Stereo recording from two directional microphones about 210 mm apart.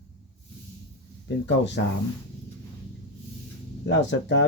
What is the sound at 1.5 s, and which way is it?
Speech, 60° left (ahead or behind).